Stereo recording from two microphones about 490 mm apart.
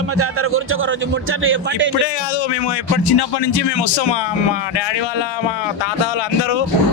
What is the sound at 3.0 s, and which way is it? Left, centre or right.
A man's voice, left.